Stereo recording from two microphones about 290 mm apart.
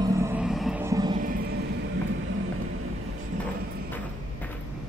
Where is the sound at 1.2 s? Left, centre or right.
Right.